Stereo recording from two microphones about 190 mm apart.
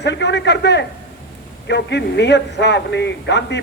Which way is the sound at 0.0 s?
65° left (ahead or behind).